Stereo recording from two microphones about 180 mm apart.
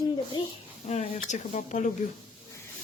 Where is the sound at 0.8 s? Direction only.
40° left (ahead or behind).